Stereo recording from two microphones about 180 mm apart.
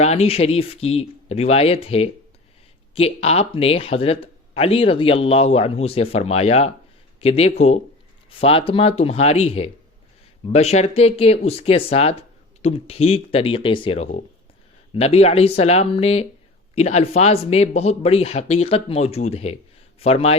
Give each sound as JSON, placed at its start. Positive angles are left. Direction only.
{"t": 0.0, "sound": "speech", "side_deg": 35}